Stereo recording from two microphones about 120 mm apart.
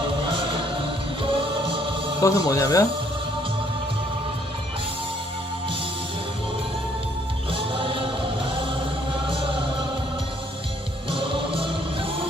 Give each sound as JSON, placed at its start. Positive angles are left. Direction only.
{"t": 0.2, "sound": "music", "side_deg": -45}
{"t": 2.2, "sound": "speech", "side_deg": 25}
{"t": 7.5, "sound": "music", "side_deg": -50}
{"t": 11.1, "sound": "music", "side_deg": -50}